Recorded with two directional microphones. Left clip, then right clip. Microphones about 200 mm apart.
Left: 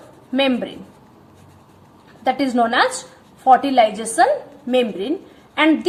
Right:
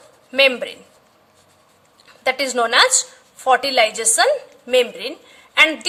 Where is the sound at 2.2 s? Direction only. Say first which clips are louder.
Left 1 dB; 25° right (ahead or behind).